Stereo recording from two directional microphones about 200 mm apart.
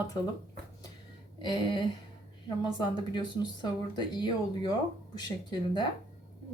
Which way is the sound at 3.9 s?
20° left (ahead or behind).